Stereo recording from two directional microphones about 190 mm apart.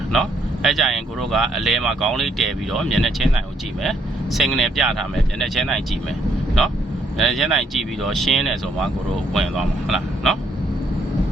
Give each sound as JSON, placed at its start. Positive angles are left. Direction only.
{"t": 0.1, "sound": "speech", "side_deg": 0}
{"t": 7.2, "sound": "speech", "side_deg": 0}